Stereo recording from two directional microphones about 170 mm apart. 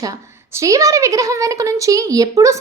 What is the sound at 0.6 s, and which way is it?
A woman's voice, 20° right (ahead or behind).